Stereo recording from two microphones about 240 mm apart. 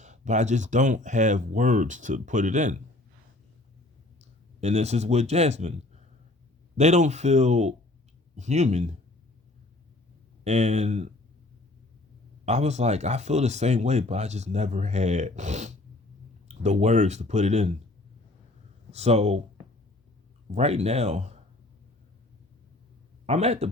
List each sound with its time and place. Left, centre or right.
0.0 s speech: right
4.2 s speech: right
10.4 s speech: right
12.5 s speech: right
18.9 s speech: right
20.5 s speech: right
23.2 s a man's voice: right